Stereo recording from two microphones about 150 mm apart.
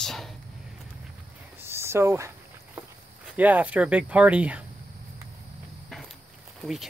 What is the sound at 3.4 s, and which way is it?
Speech, 10° right (ahead or behind).